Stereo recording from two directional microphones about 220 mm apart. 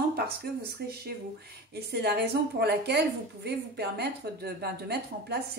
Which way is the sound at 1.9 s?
50° right (ahead or behind).